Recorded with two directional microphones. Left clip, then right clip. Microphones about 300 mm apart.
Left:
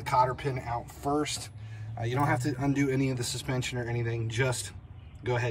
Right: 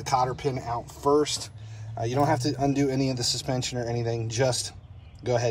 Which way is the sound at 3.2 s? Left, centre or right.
Centre.